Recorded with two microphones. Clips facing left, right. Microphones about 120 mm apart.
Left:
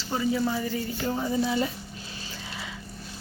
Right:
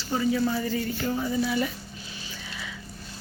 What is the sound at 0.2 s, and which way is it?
Speech, 15° left (ahead or behind).